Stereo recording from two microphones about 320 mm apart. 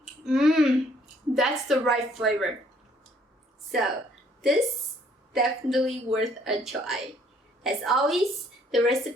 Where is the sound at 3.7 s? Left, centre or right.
Centre.